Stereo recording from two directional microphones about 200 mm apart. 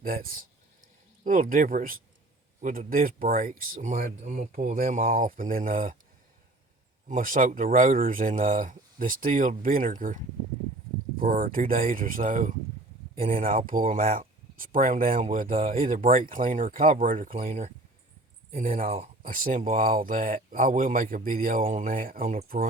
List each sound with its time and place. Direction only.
0.0 s speech: 45° right (ahead or behind)
7.1 s speech: 40° right (ahead or behind)